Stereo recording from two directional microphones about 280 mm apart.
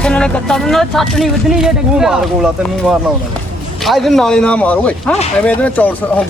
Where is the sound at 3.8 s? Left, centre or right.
Centre.